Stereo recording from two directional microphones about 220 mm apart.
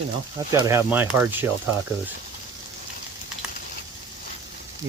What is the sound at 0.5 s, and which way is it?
Speech, 15° right (ahead or behind).